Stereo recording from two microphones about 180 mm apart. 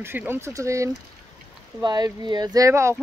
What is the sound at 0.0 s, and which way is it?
Speech, 10° right (ahead or behind).